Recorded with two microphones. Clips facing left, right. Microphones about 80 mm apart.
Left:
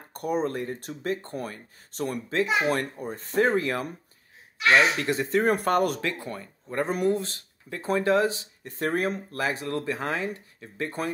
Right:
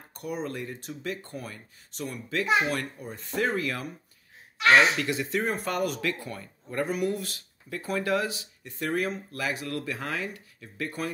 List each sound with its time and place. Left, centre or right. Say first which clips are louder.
0.1 s speech: left 6 dB; left
4.9 s speech: left 4 dB; left
5.4 s speech: left 6 dB; left
5.9 s speech: left 1 dB; left